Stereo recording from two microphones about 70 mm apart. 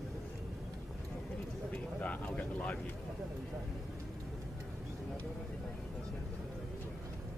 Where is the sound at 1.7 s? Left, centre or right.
Left.